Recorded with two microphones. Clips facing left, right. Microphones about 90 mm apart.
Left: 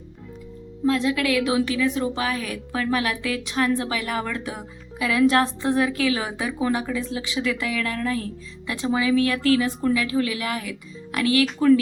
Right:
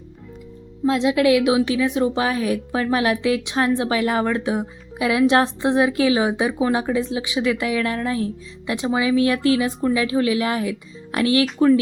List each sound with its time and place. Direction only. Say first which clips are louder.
0.9 s speech: right 5 dB; 20° right (ahead or behind)